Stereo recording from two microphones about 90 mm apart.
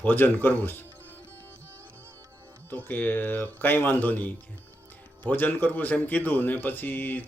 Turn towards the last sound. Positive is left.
turn(degrees=20)  # may be behind; listen again after turning